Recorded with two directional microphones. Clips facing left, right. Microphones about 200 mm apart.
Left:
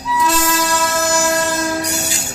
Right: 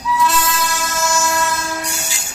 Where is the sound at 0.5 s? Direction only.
35° left (ahead or behind).